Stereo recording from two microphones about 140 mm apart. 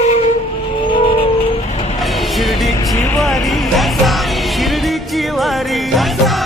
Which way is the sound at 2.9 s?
25° left (ahead or behind).